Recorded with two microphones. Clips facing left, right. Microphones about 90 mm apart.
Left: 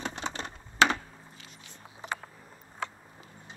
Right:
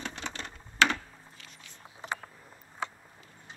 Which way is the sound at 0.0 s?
20° left (ahead or behind).